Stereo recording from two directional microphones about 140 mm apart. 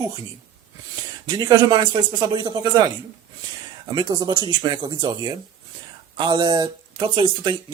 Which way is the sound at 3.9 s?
30° right (ahead or behind).